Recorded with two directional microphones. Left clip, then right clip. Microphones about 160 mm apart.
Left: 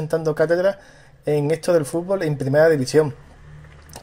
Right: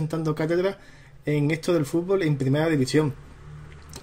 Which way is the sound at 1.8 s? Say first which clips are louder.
Left 4 dB; 15° right (ahead or behind).